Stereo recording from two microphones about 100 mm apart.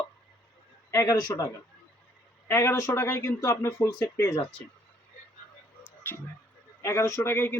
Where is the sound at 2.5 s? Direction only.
30° left (ahead or behind).